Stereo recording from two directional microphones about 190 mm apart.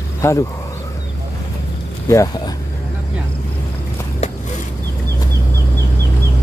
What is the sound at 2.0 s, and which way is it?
Speech, 15° left (ahead or behind).